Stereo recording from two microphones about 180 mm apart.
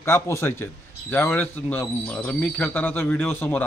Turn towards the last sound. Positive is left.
turn(degrees=10)  # may be behind; listen again after turning